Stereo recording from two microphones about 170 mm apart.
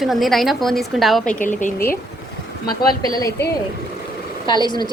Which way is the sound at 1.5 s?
45° left (ahead or behind).